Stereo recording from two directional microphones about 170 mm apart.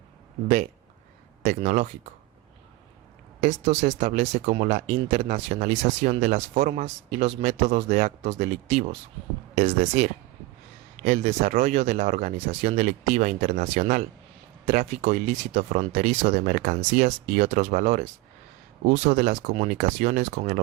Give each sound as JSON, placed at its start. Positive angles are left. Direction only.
{"t": 1.4, "sound": "speech", "side_deg": -45}
{"t": 3.4, "sound": "speech", "side_deg": -40}